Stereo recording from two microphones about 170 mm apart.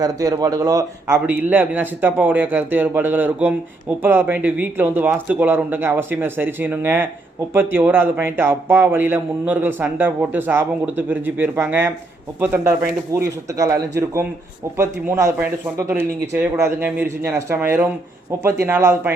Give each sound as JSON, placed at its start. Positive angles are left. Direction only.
{"t": 0.0, "sound": "a man's voice", "side_deg": -20}
{"t": 14.8, "sound": "a man's voice", "side_deg": -15}